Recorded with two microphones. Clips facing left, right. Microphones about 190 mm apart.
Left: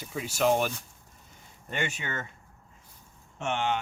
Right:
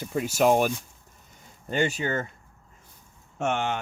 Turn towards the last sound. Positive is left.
turn(degrees=-50)  # may be behind; listen again after turning